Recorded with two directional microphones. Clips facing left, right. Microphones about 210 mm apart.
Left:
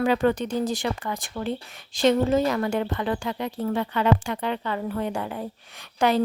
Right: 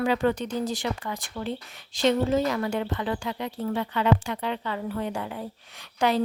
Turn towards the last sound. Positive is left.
turn(degrees=50)  # may be behind; listen again after turning